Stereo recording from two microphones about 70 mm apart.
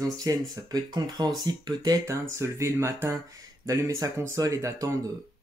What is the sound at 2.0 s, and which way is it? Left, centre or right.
Speech, right.